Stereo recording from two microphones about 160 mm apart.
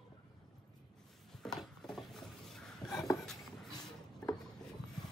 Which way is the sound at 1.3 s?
5° left (ahead or behind).